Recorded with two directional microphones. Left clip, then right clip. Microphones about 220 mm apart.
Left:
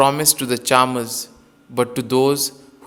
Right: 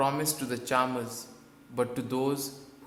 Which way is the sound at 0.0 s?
40° left (ahead or behind).